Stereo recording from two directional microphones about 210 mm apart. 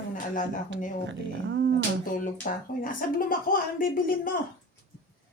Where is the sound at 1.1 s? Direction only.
60° right (ahead or behind).